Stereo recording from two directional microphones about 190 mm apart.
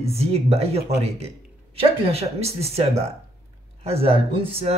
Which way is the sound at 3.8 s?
30° right (ahead or behind).